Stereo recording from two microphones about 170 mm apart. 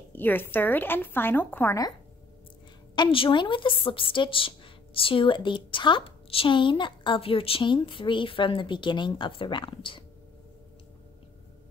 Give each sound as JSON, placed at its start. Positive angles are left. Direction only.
{"t": 0.1, "sound": "a woman's voice", "side_deg": 10}
{"t": 3.0, "sound": "a woman's voice", "side_deg": 30}